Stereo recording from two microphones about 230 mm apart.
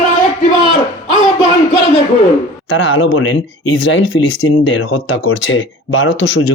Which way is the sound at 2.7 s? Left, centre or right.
Left.